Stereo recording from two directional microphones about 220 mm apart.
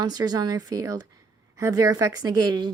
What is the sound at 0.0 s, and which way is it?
A woman's voice, 15° right (ahead or behind).